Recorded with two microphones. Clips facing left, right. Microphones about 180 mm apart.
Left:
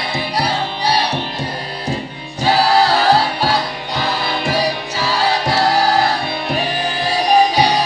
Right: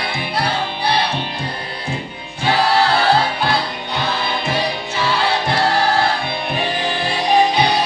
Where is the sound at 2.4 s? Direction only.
40° left (ahead or behind).